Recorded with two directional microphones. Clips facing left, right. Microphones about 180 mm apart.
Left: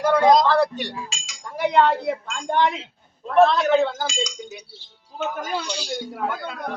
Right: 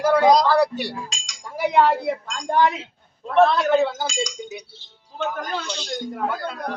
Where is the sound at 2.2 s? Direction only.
5° left (ahead or behind).